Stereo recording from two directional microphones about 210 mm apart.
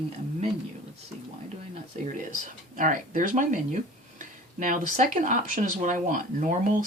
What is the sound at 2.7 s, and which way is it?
Speech, 40° right (ahead or behind).